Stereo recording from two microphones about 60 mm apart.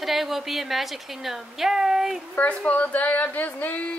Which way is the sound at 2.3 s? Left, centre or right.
Left.